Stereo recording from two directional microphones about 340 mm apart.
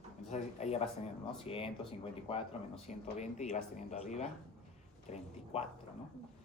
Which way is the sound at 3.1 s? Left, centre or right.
Centre.